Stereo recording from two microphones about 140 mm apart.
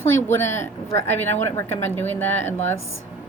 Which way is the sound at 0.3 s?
15° left (ahead or behind).